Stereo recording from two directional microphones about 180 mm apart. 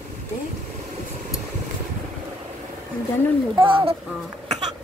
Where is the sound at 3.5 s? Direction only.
30° right (ahead or behind).